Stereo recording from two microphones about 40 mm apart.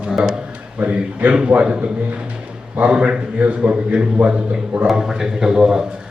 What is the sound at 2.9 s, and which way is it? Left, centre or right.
A man's voice, right.